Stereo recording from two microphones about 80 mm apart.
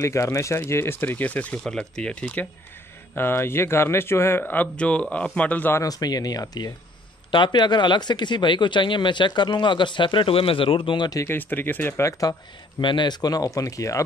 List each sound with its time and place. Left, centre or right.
0.0 s speech: left; by 1.6 s centre
1.6 s speech: centre
3.2 s speech: left
5.8 s speech: left
7.2 s speech: left
11.2 s speech: left
12.1 s speech: left
12.8 s speech: left
13.6 s speech: left